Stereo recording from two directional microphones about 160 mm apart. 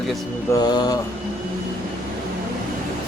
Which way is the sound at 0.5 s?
25° left (ahead or behind).